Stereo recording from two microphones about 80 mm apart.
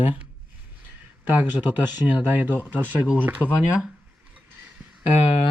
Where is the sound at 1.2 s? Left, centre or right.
Right.